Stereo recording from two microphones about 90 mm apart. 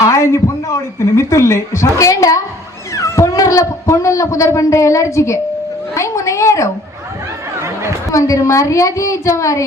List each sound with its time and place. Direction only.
0.0 s a man's voice: 35° left (ahead or behind)
7.6 s chatter: 30° right (ahead or behind)
8.1 s a man's voice: 35° left (ahead or behind)